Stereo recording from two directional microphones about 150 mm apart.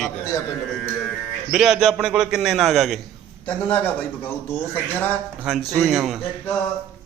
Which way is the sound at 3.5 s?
10° left (ahead or behind).